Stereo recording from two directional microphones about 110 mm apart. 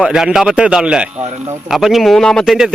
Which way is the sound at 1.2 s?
85° right.